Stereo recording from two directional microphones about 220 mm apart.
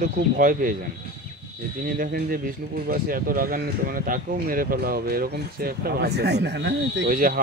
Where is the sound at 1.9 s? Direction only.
40° right (ahead or behind).